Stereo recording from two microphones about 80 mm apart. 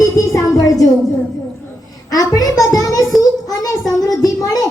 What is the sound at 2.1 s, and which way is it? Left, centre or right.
Speech, left.